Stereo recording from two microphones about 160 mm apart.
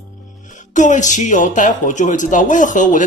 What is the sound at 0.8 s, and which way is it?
A woman's voice, 50° left (ahead or behind).